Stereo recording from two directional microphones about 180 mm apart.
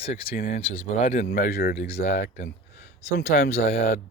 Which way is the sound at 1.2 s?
60° left (ahead or behind).